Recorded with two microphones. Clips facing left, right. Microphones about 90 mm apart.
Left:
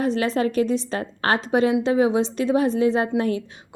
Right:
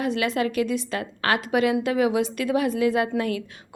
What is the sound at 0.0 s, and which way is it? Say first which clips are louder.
A woman's voice: left 3 dB; 35° left (ahead or behind).